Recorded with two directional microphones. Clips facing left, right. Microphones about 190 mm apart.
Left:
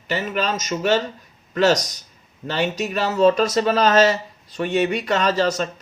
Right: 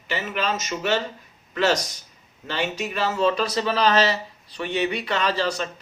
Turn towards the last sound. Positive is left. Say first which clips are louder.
# left 4 dB
turn(degrees=40)  # may be behind; listen again after turning